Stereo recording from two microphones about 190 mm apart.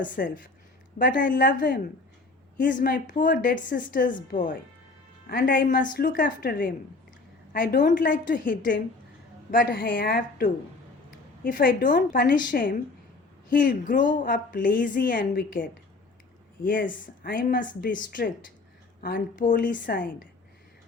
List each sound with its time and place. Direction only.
0.0 s a woman's voice: 45° left (ahead or behind)